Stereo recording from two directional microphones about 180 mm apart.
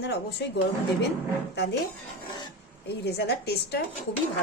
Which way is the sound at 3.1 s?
65° left (ahead or behind).